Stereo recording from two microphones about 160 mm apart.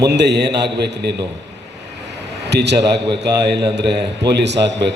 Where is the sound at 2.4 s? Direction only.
90° right.